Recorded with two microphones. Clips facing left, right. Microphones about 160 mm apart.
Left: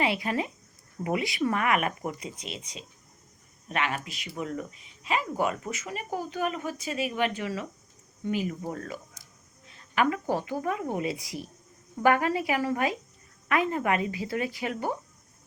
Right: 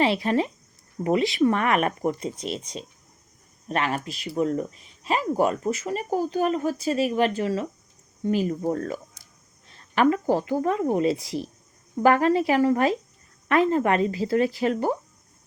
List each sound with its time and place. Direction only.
0.0 s speech: 30° right (ahead or behind)